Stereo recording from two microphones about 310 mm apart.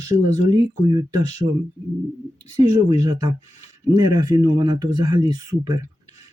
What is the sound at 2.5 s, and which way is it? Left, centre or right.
Speech, centre.